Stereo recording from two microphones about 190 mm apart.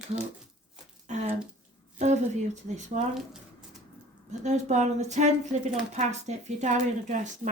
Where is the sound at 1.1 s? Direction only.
35° right (ahead or behind).